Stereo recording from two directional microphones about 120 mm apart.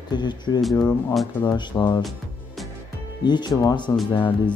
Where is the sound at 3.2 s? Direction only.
40° left (ahead or behind).